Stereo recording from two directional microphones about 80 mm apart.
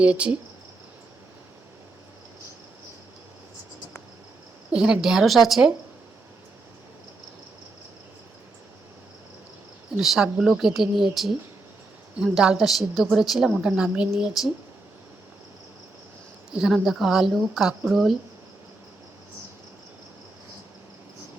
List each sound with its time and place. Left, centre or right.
0.0 s a woman's voice: centre
4.7 s speech: centre
10.0 s a woman's voice: centre
16.5 s speech: centre